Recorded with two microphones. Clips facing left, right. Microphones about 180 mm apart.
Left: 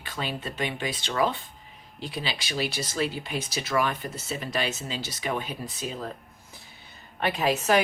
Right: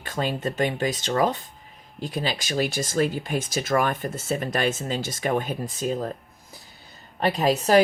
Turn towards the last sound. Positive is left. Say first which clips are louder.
# right 5 dB
turn(degrees=-35)  # may be behind; listen again after turning